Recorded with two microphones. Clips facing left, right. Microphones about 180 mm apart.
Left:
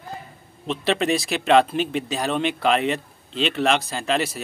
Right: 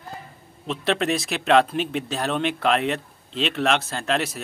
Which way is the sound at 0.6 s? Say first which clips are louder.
Left 1 dB; centre (ahead or behind).